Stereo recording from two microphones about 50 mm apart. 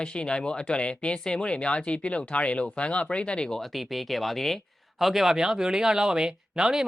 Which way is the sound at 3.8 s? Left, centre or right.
Centre.